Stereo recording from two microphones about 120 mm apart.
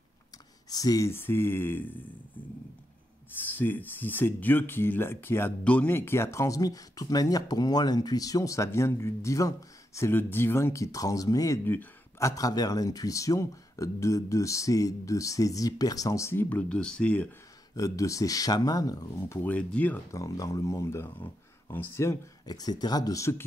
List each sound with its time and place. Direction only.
0.7 s speech: 30° left (ahead or behind); by 2.0 s 15° left (ahead or behind)
3.3 s speech: 15° left (ahead or behind)
11.6 s speech: 15° left (ahead or behind)
12.3 s speech: 30° left (ahead or behind); by 17.3 s 10° left (ahead or behind)
17.7 s speech: 25° left (ahead or behind); by 20.0 s 10° left (ahead or behind)
20.1 s speech: 25° left (ahead or behind)